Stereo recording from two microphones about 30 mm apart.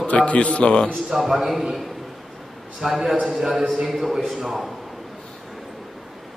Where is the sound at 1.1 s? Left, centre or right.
Centre.